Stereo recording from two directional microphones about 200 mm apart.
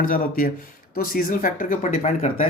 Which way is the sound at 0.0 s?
45° left (ahead or behind).